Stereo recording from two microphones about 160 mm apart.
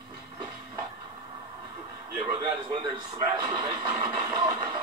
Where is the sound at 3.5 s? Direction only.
25° right (ahead or behind).